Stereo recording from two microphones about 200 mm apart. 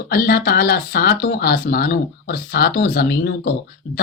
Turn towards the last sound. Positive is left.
turn(degrees=50)  # may be behind; listen again after turning